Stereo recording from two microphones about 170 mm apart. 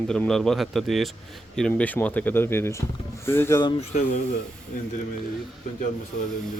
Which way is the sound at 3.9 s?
45° left (ahead or behind).